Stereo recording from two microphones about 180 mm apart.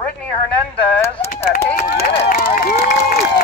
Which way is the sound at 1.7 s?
55° left (ahead or behind).